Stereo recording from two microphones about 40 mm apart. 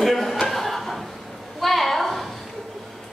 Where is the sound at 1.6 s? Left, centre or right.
Centre.